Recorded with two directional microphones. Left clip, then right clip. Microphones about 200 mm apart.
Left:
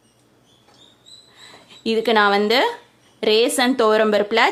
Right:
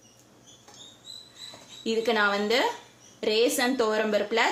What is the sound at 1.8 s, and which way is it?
Speech, 50° left (ahead or behind).